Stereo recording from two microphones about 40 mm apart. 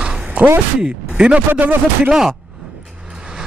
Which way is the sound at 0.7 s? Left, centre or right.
Right.